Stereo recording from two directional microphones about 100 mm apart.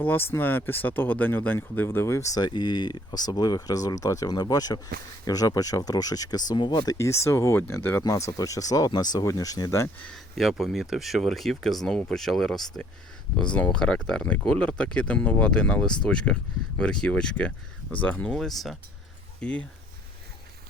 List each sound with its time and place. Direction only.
0.0 s speech: 20° left (ahead or behind); by 6.9 s 45° left (ahead or behind)
6.9 s speech: 30° left (ahead or behind)
8.0 s speech: 35° left (ahead or behind)
10.0 s speech: 5° left (ahead or behind)
18.3 s speech: centre (ahead or behind)
19.4 s speech: 15° left (ahead or behind)